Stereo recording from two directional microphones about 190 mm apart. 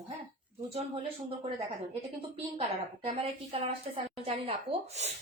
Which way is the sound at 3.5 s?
30° right (ahead or behind).